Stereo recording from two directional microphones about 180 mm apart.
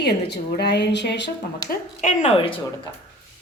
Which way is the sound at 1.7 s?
45° left (ahead or behind).